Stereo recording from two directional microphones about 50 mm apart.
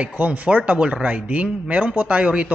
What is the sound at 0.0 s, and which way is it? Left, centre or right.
A man's voice, right.